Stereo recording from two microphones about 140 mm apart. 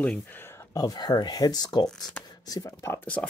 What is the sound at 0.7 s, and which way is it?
Speech, 30° left (ahead or behind).